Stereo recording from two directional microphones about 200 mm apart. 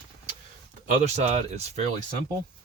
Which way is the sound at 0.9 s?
35° right (ahead or behind).